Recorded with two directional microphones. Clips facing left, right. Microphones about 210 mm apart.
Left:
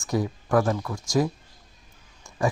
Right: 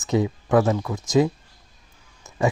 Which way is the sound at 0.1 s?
20° right (ahead or behind).